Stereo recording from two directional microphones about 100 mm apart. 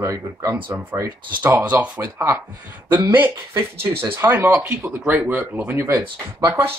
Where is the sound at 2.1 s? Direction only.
25° right (ahead or behind).